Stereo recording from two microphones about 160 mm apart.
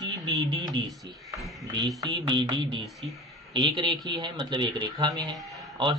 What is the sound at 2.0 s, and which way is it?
Speech, 30° right (ahead or behind).